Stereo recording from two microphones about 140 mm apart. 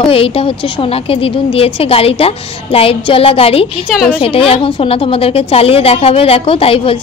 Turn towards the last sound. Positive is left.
turn(degrees=40)  # may be behind; listen again after turning